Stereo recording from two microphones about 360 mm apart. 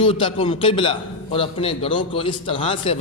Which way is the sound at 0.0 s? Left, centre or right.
Centre.